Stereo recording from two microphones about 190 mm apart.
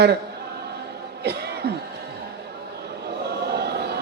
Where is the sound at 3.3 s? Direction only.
60° right (ahead or behind).